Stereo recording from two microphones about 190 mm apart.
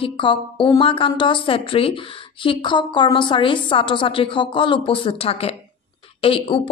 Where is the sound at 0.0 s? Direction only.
25° left (ahead or behind).